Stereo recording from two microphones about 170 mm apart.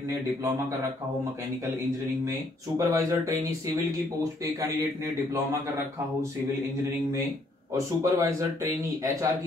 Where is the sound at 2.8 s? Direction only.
20° right (ahead or behind).